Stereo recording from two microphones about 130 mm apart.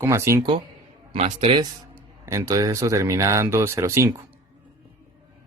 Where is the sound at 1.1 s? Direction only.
50° right (ahead or behind).